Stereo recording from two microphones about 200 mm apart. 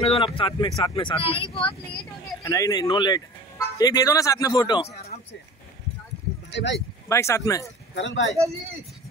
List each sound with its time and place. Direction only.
0.0 s speech: 30° left (ahead or behind)
2.4 s speech: 15° left (ahead or behind)
6.5 s speech: 60° left (ahead or behind)
7.1 s speech: 15° left (ahead or behind)
7.9 s speech: 65° left (ahead or behind)